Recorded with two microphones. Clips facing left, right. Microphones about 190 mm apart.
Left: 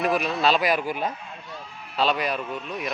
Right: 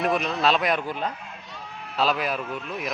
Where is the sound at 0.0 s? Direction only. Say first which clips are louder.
Even; centre (ahead or behind).